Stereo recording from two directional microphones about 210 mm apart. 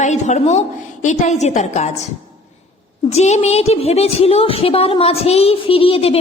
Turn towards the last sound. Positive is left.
turn(degrees=25)  # may be behind; listen again after turning